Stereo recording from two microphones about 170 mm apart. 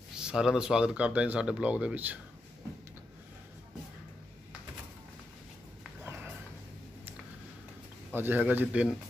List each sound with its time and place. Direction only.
0.1 s speech: 5° right (ahead or behind)
6.0 s a sound: 10° right (ahead or behind)
8.1 s a man's voice: 10° right (ahead or behind)